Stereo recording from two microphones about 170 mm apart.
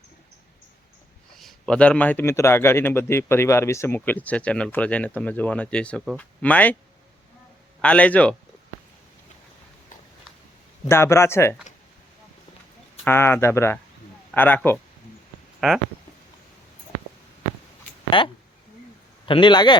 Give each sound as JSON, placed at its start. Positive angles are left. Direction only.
{"t": 1.4, "sound": "speech", "side_deg": 0}
{"t": 7.8, "sound": "speech", "side_deg": 5}
{"t": 10.8, "sound": "speech", "side_deg": 15}
{"t": 13.1, "sound": "speech", "side_deg": 15}
{"t": 18.1, "sound": "a man's voice", "side_deg": 30}